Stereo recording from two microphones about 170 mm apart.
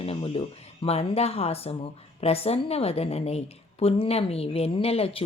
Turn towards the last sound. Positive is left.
turn(degrees=35)  # may be behind; listen again after turning